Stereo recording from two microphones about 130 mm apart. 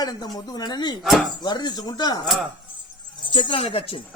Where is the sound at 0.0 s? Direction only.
30° left (ahead or behind).